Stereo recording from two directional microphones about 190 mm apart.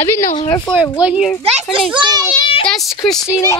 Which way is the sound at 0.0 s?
15° left (ahead or behind).